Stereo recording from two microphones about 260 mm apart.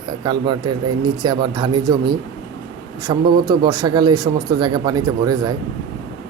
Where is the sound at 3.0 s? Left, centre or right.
Centre.